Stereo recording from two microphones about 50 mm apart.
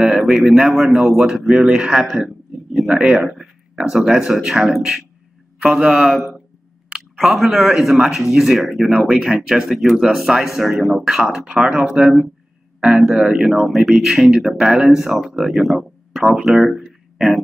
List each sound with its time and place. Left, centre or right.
0.1 s a man's voice: centre
2.0 s a sound: centre
2.9 s speech: centre
7.2 s speech: centre
9.7 s a man's voice: centre; by 12.1 s right
12.8 s a man's voice: centre